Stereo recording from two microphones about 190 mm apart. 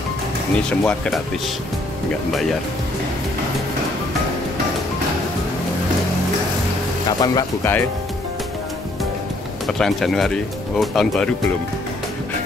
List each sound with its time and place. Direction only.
0.7 s speech: 5° left (ahead or behind)
7.1 s speech: 20° left (ahead or behind)
9.7 s speech: centre (ahead or behind)